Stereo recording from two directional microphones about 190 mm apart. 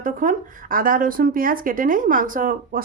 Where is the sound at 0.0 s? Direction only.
45° right (ahead or behind).